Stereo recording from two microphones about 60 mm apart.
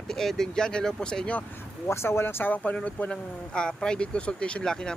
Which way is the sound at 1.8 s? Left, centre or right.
Left.